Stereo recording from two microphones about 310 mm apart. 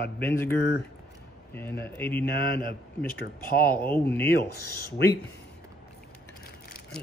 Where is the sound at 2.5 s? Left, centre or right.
Left.